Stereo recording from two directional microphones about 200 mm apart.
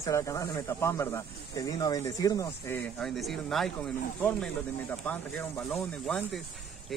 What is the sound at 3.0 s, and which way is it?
Speech, centre (ahead or behind).